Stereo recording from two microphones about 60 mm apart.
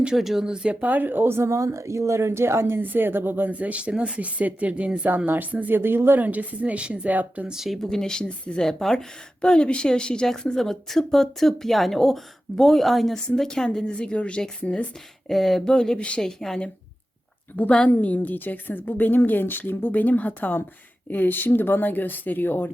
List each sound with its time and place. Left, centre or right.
0.0 s speech: centre
5.0 s speech: right
7.6 s speech: centre
7.9 s a woman's voice: centre
15.3 s a woman's voice: centre
17.6 s a woman's voice: centre